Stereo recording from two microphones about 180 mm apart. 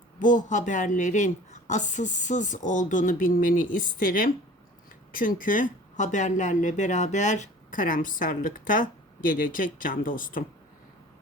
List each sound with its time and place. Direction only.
0.2 s speech: 45° left (ahead or behind)